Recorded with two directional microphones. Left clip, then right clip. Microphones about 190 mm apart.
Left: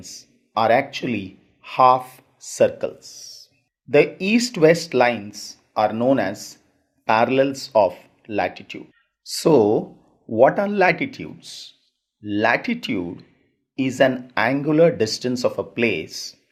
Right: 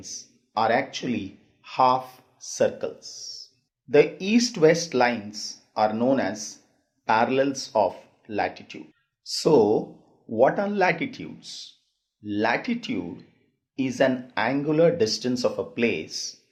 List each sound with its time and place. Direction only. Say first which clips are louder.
0.0 s speech: right 1 dB; 40° left (ahead or behind)